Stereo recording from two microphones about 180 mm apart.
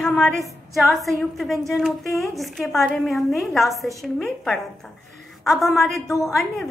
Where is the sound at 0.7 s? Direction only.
Centre (ahead or behind).